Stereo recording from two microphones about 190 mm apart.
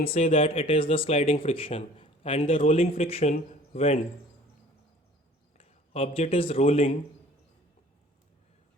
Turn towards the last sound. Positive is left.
turn(degrees=30)  # may be behind; listen again after turning